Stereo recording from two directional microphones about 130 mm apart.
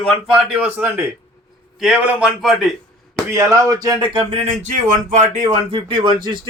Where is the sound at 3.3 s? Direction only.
20° right (ahead or behind).